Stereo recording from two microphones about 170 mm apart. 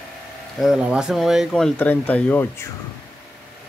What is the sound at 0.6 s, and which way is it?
Speech, 5° right (ahead or behind).